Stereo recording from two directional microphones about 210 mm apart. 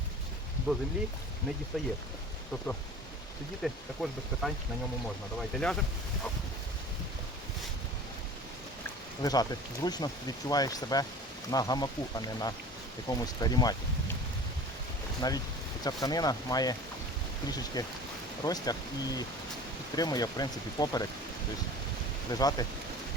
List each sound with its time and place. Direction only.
0.7 s speech: 5° right (ahead or behind)
3.6 s speech: centre (ahead or behind)
9.2 s speech: 20° left (ahead or behind)
15.2 s speech: 20° left (ahead or behind)
17.8 s speech: 15° left (ahead or behind)
22.3 s speech: 15° left (ahead or behind)